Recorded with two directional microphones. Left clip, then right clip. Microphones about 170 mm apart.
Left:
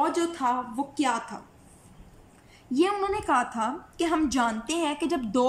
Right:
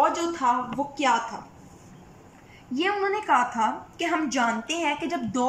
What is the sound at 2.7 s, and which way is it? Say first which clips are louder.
A woman's voice: even; 20° left (ahead or behind).